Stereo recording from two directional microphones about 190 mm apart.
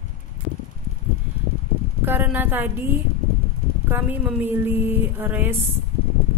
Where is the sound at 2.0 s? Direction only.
10° right (ahead or behind).